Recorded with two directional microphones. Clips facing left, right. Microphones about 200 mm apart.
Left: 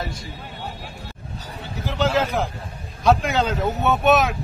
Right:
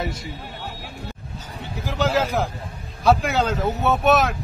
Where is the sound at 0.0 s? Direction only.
20° right (ahead or behind).